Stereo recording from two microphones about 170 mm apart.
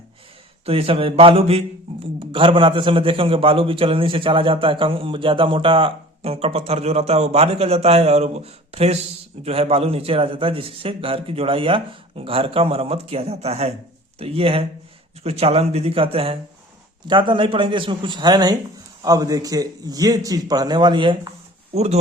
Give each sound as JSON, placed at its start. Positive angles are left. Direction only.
{"t": 0.6, "sound": "a man's voice", "side_deg": -35}